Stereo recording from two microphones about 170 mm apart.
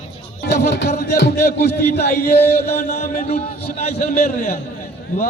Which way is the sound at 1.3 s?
15° left (ahead or behind).